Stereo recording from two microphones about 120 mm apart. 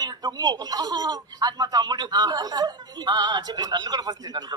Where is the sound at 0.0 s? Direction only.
35° right (ahead or behind).